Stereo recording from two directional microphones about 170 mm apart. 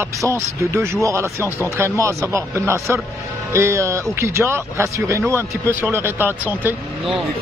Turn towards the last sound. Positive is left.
turn(degrees=-10)  # may be behind; listen again after turning